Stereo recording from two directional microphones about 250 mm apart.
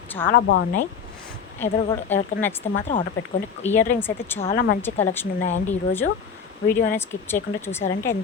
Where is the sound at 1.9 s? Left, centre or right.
Centre.